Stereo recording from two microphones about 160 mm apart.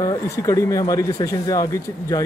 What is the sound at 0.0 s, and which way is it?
Speech, 20° left (ahead or behind).